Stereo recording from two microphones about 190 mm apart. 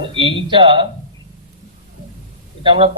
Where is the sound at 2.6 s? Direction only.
30° right (ahead or behind).